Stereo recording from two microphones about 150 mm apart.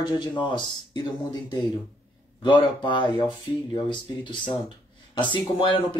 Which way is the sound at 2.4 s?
35° left (ahead or behind).